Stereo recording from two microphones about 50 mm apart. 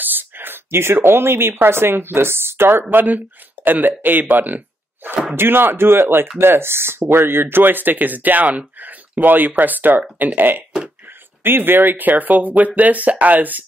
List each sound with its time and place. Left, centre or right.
0.0 s speech: right
2.9 s speech: right
5.3 s speech: right